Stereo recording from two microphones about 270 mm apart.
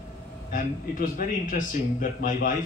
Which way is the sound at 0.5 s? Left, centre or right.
Left.